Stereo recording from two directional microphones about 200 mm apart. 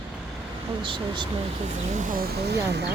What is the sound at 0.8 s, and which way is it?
Speech, 25° right (ahead or behind).